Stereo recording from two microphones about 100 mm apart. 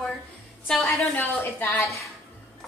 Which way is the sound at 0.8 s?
20° left (ahead or behind).